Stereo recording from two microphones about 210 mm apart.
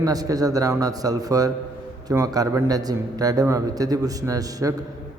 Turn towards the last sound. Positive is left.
turn(degrees=-15)  # may be behind; listen again after turning